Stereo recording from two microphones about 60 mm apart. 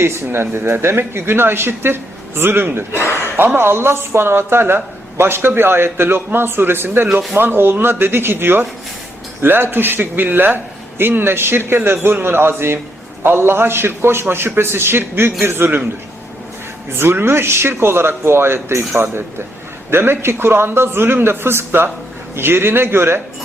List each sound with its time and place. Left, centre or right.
0.0 s speech: right
17.0 s speech: right
19.9 s speech: right